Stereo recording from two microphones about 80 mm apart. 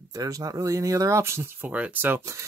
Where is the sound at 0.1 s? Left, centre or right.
Right.